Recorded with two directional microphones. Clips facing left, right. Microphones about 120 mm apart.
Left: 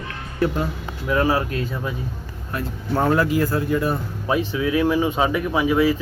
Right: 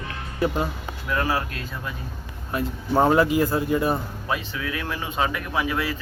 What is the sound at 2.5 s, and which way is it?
Speech, 20° right (ahead or behind).